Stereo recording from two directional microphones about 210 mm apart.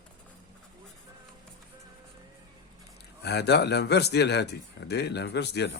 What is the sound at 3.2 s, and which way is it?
Speech, 50° left (ahead or behind).